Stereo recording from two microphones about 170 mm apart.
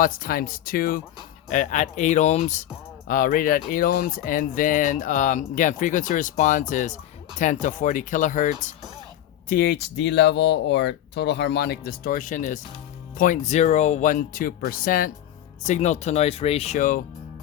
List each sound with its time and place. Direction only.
0.0 s speech: 55° left (ahead or behind)
1.5 s speech: 45° left (ahead or behind)
3.1 s speech: 55° left (ahead or behind)
9.5 s speech: 65° left (ahead or behind)
15.6 s speech: 45° left (ahead or behind)